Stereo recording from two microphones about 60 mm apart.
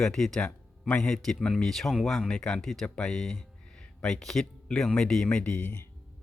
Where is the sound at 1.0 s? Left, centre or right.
Centre.